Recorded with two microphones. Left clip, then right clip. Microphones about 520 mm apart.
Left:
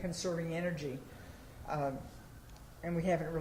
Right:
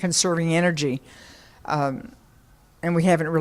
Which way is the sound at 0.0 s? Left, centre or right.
Right.